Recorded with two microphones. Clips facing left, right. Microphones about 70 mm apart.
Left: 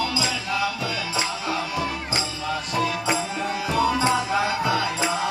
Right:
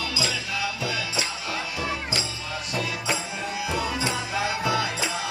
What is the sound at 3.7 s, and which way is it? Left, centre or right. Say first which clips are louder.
Music: left 8 dB; left.